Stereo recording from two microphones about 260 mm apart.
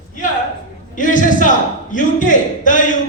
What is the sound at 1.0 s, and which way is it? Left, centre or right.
A man's voice, left.